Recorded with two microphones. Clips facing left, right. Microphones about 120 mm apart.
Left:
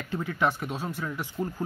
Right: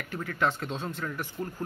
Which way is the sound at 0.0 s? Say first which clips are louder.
Left 2 dB; 20° left (ahead or behind).